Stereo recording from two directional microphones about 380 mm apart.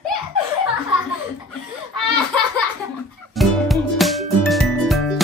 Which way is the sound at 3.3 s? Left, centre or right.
Centre.